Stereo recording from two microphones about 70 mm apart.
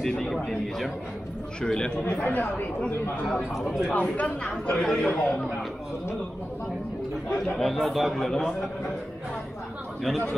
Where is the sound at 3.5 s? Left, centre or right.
Centre.